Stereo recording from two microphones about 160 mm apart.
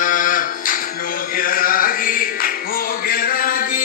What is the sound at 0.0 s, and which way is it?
Music, 55° left (ahead or behind).